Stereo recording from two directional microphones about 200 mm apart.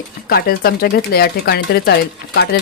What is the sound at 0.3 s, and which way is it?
Speech, 50° left (ahead or behind).